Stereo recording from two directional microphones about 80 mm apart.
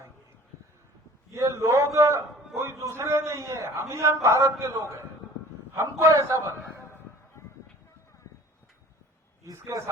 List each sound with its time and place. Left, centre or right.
1.3 s a man's voice: right
9.4 s a man's voice: right